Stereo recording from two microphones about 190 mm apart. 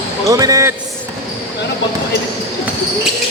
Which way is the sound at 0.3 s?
20° right (ahead or behind).